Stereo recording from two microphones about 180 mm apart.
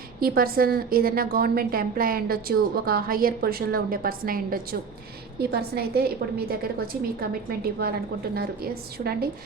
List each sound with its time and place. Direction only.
0.2 s a woman's voice: 55° right (ahead or behind)